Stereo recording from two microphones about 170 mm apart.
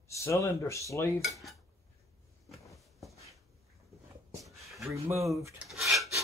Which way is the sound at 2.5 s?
Centre (ahead or behind).